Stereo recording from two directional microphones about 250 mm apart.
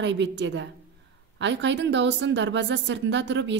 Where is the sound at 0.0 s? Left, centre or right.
Right.